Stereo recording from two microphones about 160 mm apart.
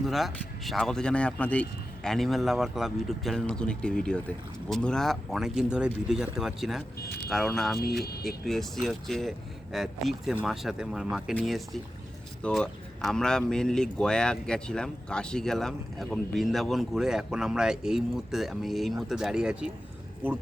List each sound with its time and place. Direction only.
0.0 s speech: centre (ahead or behind)